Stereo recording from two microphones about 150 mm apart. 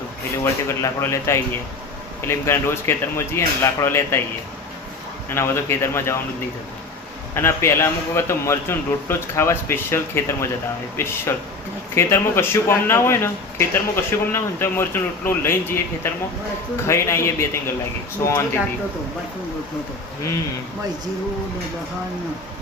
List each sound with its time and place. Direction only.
0.7 s speech: 20° left (ahead or behind)
5.3 s speech: 15° left (ahead or behind)
7.3 s speech: 15° left (ahead or behind)
16.8 s a man's voice: 20° left (ahead or behind)